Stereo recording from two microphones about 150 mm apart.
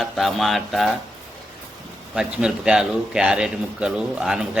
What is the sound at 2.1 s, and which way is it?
A man's voice, 5° right (ahead or behind).